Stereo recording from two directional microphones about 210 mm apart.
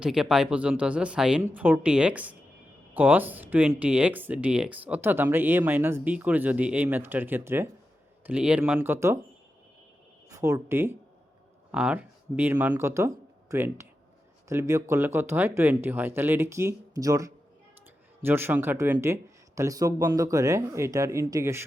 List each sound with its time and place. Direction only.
0.0 s speech: 5° right (ahead or behind)
10.2 s speech: 15° right (ahead or behind)